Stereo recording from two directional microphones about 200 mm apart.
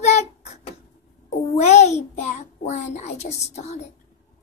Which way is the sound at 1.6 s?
35° left (ahead or behind).